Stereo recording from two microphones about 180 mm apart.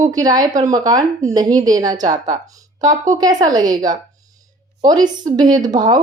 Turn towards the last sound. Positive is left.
turn(degrees=-25)  # may be behind; listen again after turning